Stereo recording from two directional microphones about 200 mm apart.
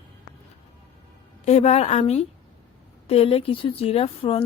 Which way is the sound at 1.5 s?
35° left (ahead or behind).